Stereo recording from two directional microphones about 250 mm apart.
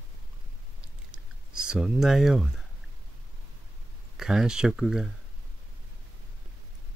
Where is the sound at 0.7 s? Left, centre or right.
Left.